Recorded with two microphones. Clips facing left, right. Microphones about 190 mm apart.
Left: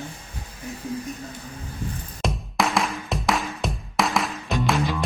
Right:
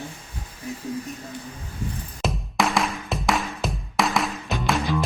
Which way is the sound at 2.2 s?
Centre (ahead or behind).